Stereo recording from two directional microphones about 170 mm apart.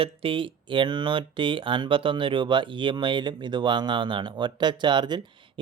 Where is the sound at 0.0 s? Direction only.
30° right (ahead or behind).